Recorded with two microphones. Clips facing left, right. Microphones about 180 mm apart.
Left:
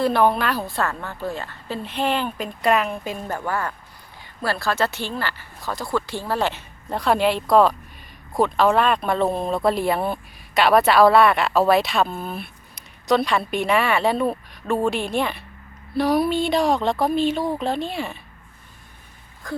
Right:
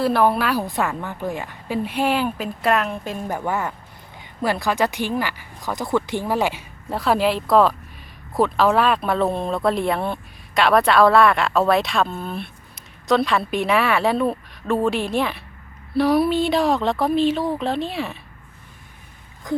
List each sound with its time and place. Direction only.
0.0 s speech: 5° right (ahead or behind)
3.2 s speech: 15° right (ahead or behind); by 18.2 s centre (ahead or behind)
19.4 s a sound: 20° right (ahead or behind)